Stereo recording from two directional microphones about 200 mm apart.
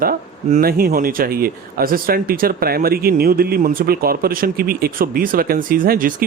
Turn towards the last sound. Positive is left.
turn(degrees=-45)  # may be behind; listen again after turning